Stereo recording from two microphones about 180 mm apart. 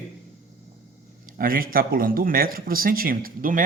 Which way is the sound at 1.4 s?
55° right (ahead or behind).